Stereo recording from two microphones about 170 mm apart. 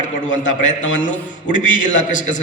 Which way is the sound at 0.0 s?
45° left (ahead or behind).